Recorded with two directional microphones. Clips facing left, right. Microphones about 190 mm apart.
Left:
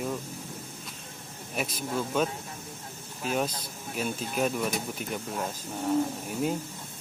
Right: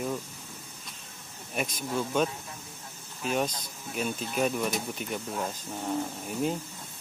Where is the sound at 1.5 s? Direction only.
5° left (ahead or behind).